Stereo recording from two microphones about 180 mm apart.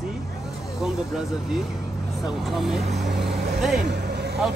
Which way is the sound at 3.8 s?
70° right (ahead or behind).